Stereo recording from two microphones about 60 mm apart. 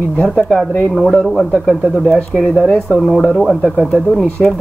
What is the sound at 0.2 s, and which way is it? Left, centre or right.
Speech, centre.